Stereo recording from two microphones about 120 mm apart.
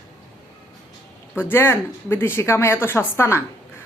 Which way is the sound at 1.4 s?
20° left (ahead or behind).